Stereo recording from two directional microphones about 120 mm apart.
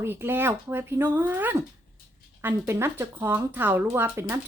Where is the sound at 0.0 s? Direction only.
20° right (ahead or behind).